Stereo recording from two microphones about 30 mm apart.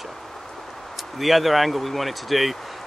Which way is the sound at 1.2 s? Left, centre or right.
Centre.